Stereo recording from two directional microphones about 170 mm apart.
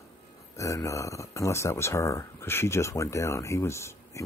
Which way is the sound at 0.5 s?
20° left (ahead or behind).